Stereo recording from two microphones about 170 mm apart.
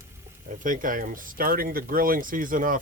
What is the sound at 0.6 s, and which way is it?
Speech, 50° right (ahead or behind).